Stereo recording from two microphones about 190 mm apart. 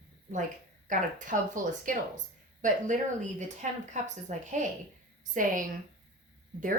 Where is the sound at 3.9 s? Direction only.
40° right (ahead or behind).